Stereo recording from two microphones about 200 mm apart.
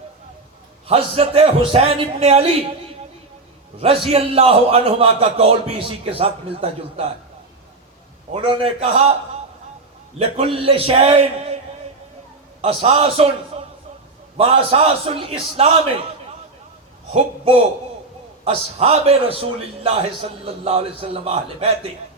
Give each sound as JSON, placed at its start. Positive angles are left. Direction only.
{"t": 0.9, "sound": "a man's voice", "side_deg": -30}
{"t": 4.1, "sound": "a man's voice", "side_deg": -30}
{"t": 8.3, "sound": "a man's voice", "side_deg": -25}
{"t": 10.2, "sound": "a man's voice", "side_deg": -30}
{"t": 12.6, "sound": "a man's voice", "side_deg": -30}